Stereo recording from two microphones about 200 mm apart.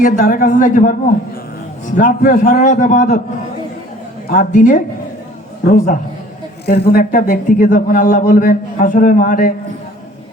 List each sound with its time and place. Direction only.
0.0 s a man's voice: 40° left (ahead or behind)
4.3 s a man's voice: 40° left (ahead or behind)